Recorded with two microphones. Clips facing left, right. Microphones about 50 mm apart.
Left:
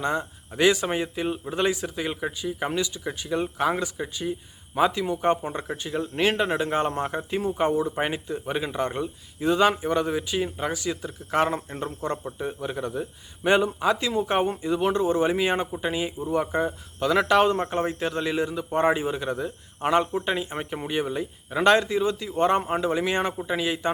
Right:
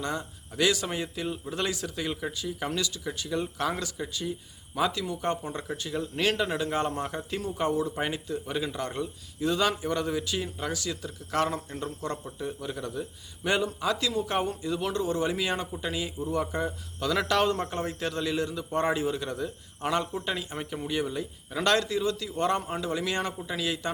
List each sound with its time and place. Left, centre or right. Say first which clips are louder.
0.0 s a man's voice: left 6 dB; left